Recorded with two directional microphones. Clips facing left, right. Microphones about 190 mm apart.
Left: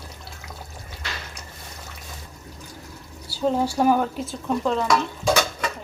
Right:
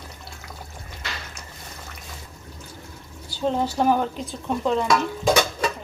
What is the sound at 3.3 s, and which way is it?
Speech, 10° left (ahead or behind).